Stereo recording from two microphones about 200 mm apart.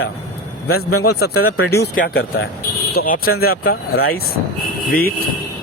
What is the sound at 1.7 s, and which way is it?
Speech, 50° left (ahead or behind).